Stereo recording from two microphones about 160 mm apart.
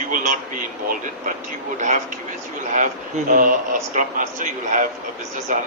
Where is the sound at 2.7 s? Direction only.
55° right (ahead or behind).